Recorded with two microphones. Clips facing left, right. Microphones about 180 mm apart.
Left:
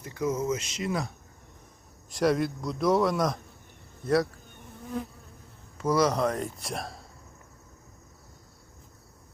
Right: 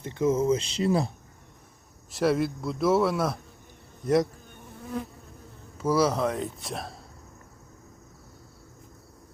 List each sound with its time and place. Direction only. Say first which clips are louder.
0.0 s speech: right 5 dB; 25° right (ahead or behind)
2.1 s a man's voice: right 1 dB; 5° right (ahead or behind)
4.0 s speech: right 2 dB; 20° right (ahead or behind)
5.7 s a man's voice: right 1 dB; 5° right (ahead or behind)